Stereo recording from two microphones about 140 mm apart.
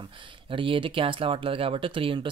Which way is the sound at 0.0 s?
35° right (ahead or behind).